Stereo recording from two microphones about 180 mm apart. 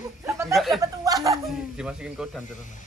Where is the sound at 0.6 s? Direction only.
Centre (ahead or behind).